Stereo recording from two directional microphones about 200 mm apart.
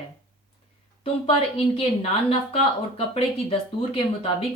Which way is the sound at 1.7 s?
30° left (ahead or behind).